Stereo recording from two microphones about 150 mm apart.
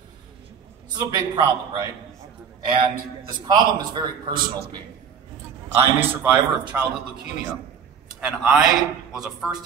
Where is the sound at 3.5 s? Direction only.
25° right (ahead or behind).